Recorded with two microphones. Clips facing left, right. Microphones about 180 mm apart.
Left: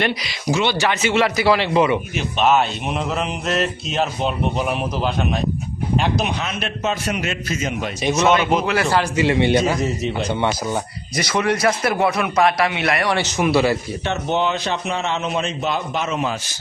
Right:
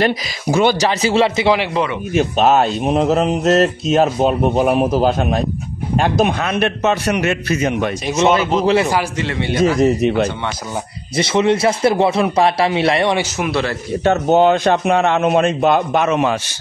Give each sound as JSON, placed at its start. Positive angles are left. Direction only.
{"t": 0.5, "sound": "speech", "side_deg": -50}
{"t": 1.7, "sound": "a man's voice", "side_deg": 10}
{"t": 2.1, "sound": "a man's voice", "side_deg": -40}
{"t": 8.2, "sound": "a man's voice", "side_deg": -30}
{"t": 9.1, "sound": "a man's voice", "side_deg": 15}
{"t": 9.6, "sound": "a man's voice", "side_deg": -60}
{"t": 11.1, "sound": "a man's voice", "side_deg": -25}
{"t": 13.4, "sound": "a man's voice", "side_deg": 5}
{"t": 14.0, "sound": "a man's voice", "side_deg": -45}